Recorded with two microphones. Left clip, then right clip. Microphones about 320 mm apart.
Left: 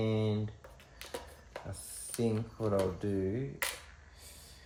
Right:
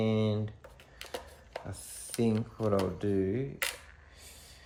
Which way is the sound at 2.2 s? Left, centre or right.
Right.